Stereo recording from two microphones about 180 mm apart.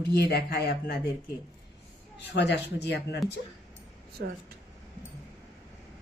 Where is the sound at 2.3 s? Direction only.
70° left (ahead or behind).